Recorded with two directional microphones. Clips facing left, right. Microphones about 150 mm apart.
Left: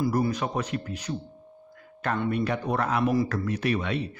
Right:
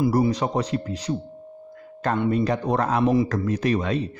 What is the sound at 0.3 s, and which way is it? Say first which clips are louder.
Speech: right 5 dB; 35° right (ahead or behind).